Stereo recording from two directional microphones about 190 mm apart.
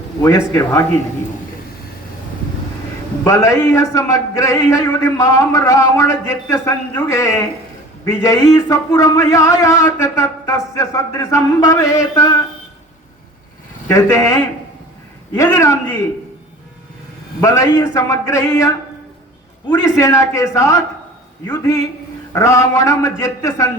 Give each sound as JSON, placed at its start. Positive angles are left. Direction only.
{"t": 0.2, "sound": "a man's voice", "side_deg": 15}
{"t": 3.2, "sound": "a man's voice", "side_deg": 15}
{"t": 13.8, "sound": "a man's voice", "side_deg": 15}
{"t": 17.4, "sound": "a man's voice", "side_deg": 15}